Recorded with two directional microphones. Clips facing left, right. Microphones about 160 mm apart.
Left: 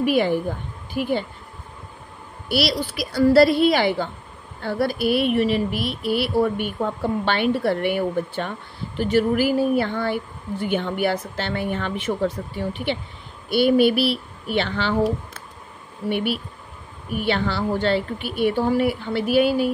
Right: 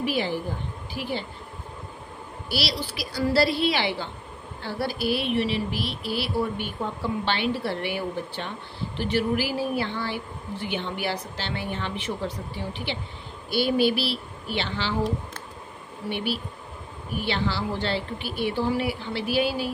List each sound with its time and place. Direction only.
0.0 s speech: 55° left (ahead or behind)
2.9 s speech: 55° left (ahead or behind)
17.2 s speech: 55° left (ahead or behind)